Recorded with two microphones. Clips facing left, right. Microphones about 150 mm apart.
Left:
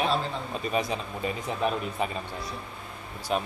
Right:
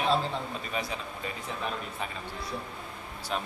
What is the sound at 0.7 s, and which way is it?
Speech, 20° left (ahead or behind).